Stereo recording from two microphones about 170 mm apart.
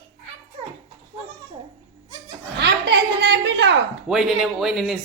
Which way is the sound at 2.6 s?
90° right.